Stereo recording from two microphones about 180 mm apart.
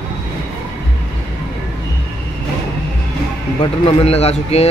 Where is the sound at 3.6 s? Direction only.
30° left (ahead or behind).